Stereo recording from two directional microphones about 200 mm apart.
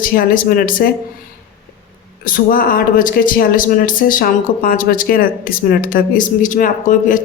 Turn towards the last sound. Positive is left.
turn(degrees=40)  # may be behind; listen again after turning